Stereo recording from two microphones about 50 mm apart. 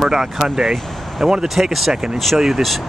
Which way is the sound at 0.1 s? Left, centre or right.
Centre.